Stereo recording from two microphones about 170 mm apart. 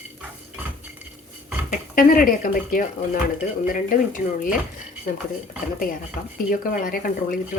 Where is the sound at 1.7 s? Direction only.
55° left (ahead or behind).